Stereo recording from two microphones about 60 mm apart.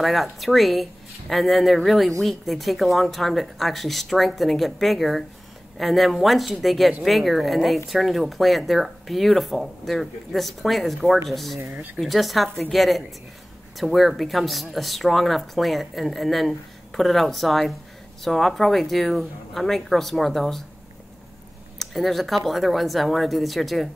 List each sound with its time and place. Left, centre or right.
0.0 s speech: centre
11.7 s speech: right
12.0 s speech: centre
21.7 s speech: centre